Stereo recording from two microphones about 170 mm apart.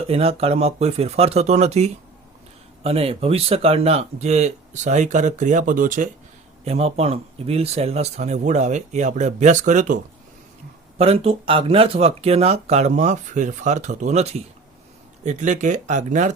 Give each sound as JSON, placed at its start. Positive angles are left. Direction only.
{"t": 0.1, "sound": "speech", "side_deg": -35}
{"t": 6.7, "sound": "speech", "side_deg": -40}
{"t": 10.9, "sound": "speech", "side_deg": -35}